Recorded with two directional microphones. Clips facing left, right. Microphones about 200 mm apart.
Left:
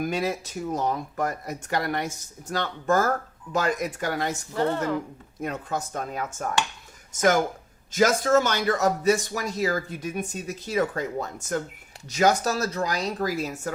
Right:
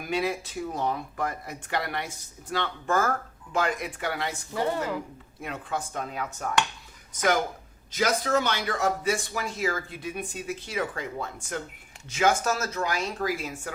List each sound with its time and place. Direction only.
0.0 s speech: 40° left (ahead or behind)
4.5 s speech: 10° right (ahead or behind)
5.4 s speech: 40° left (ahead or behind)